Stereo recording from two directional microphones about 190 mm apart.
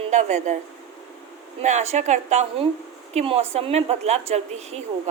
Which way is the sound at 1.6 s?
35° right (ahead or behind).